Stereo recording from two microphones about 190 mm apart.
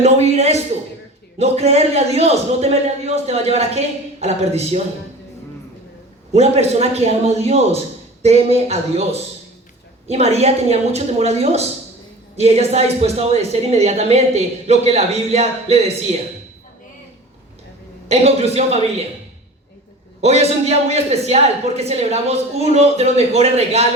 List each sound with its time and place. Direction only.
0.0 s a sound: 35° right (ahead or behind)
1.4 s a woman's voice: 35° right (ahead or behind)
6.3 s a woman's voice: 35° right (ahead or behind)
18.1 s a woman's voice: 35° right (ahead or behind)
20.2 s a woman's voice: 35° right (ahead or behind)